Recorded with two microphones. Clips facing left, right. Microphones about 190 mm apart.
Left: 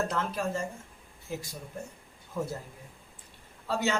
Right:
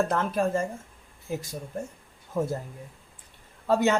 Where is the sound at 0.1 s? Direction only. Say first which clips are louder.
Right 6 dB; 50° right (ahead or behind).